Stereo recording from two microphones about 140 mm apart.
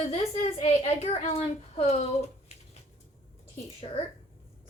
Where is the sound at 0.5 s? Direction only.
45° left (ahead or behind).